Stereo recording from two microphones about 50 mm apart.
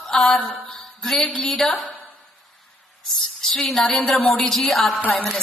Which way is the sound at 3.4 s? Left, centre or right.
Centre.